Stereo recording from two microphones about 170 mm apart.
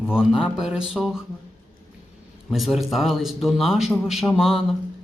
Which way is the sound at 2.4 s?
Centre (ahead or behind).